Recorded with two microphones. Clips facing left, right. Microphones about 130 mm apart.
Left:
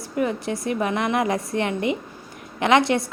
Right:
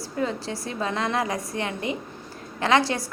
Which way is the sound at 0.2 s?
20° left (ahead or behind).